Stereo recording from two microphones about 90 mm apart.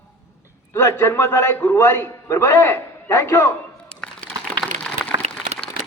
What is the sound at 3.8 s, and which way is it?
Crumpling, 10° left (ahead or behind).